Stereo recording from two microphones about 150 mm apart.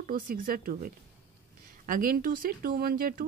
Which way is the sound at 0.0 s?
70° right (ahead or behind).